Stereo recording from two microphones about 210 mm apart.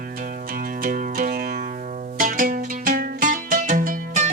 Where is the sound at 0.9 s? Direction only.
40° right (ahead or behind).